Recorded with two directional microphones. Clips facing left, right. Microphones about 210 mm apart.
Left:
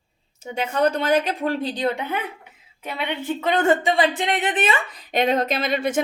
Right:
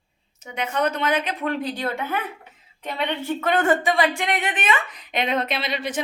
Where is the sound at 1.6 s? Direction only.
20° left (ahead or behind).